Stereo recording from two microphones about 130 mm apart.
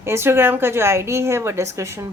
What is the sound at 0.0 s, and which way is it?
A woman's voice, 20° right (ahead or behind).